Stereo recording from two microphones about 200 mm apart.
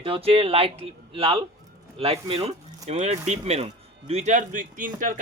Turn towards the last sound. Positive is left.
turn(degrees=-40)  # may be behind; listen again after turning